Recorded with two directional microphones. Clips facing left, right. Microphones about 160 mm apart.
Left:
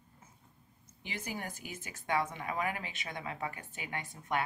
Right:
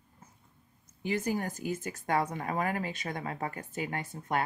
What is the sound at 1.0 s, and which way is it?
Speech, 45° right (ahead or behind).